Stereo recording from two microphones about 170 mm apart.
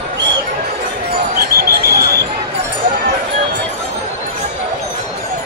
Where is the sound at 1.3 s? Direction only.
65° right (ahead or behind).